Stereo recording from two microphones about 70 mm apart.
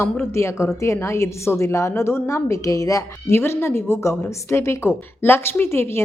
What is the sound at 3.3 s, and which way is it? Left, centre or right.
A woman's voice, left.